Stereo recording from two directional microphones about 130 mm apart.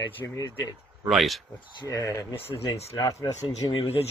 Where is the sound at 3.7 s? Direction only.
50° left (ahead or behind).